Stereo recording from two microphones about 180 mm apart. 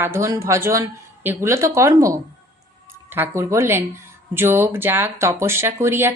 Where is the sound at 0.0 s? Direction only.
15° right (ahead or behind).